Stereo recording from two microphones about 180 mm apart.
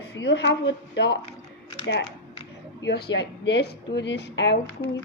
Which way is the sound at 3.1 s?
70° left (ahead or behind).